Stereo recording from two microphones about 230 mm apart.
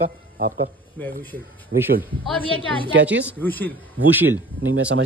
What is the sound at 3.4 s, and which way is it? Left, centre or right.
Speech, centre.